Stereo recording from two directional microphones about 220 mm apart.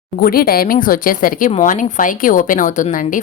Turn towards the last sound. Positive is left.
turn(degrees=35)  # may be behind; listen again after turning